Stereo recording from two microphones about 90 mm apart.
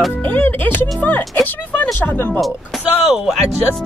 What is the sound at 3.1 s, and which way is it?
Speech, 5° right (ahead or behind).